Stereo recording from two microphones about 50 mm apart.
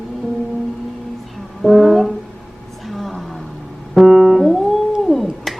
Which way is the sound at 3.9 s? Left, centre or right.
Centre.